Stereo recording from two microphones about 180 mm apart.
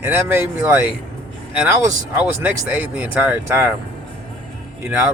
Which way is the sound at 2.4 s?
10° right (ahead or behind).